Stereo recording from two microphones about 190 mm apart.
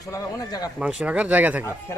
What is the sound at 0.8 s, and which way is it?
Speech, 5° right (ahead or behind).